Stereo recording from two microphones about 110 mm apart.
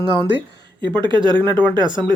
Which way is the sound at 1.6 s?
45° right (ahead or behind).